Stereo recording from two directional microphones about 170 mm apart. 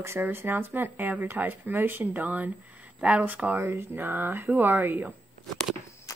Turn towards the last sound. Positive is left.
turn(degrees=20)  # may be behind; listen again after turning